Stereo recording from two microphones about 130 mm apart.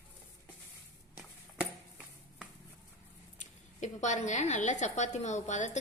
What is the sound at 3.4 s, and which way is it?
A woman's voice, 65° left (ahead or behind).